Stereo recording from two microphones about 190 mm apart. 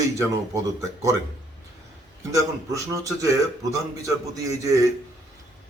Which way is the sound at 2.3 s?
15° right (ahead or behind).